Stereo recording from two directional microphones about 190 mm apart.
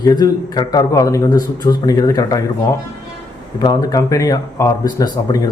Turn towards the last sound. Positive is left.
turn(degrees=20)  # may be behind; listen again after turning